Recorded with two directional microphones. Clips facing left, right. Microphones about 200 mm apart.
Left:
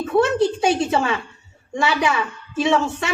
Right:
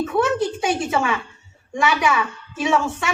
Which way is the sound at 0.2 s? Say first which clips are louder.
Left 4 dB; 30° left (ahead or behind).